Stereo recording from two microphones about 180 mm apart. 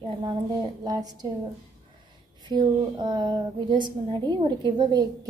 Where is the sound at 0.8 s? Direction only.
20° right (ahead or behind).